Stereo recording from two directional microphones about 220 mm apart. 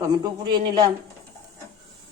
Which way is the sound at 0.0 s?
15° right (ahead or behind).